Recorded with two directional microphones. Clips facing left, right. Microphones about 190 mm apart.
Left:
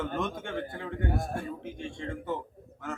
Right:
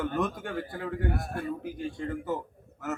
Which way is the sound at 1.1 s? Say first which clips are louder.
Even; 25° left (ahead or behind).